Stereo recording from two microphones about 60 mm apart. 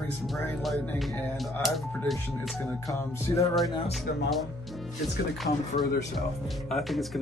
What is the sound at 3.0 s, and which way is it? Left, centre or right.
Music, left.